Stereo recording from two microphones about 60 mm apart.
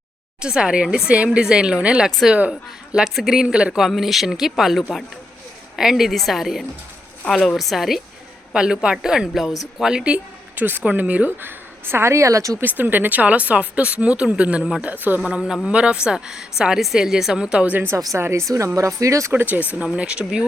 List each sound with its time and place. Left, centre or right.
0.4 s a woman's voice: centre
3.8 s a man's voice: centre
8.5 s a woman's voice: centre
9.8 s a woman's voice: centre
10.6 s a woman's voice: right
12.5 s speech: right
15.6 s a woman's voice: centre
17.9 s speech: right
18.2 s speech: right
19.3 s a woman's voice: right
20.0 s a woman's voice: centre